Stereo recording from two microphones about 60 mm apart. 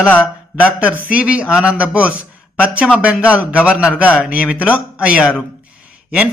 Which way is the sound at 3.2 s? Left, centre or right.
Right.